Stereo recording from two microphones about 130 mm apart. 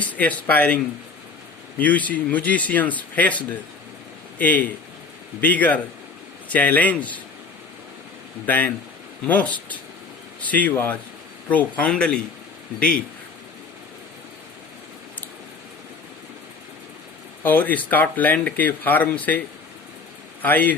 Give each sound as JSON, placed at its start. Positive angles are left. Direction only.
{"t": 0.0, "sound": "speech", "side_deg": 10}
{"t": 1.8, "sound": "speech", "side_deg": 10}
{"t": 8.4, "sound": "speech", "side_deg": 10}
{"t": 17.4, "sound": "speech", "side_deg": 15}
{"t": 20.4, "sound": "speech", "side_deg": 15}